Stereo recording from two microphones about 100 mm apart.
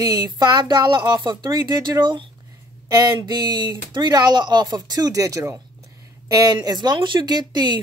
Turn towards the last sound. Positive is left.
turn(degrees=-45)  # may be behind; listen again after turning